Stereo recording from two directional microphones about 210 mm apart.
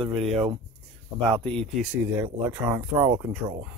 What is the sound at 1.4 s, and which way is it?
Speech, 5° left (ahead or behind).